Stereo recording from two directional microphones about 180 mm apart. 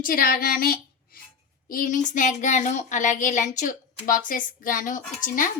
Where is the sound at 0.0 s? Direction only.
50° left (ahead or behind).